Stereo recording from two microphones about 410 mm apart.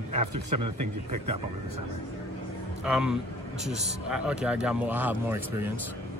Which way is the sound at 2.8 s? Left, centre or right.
Centre.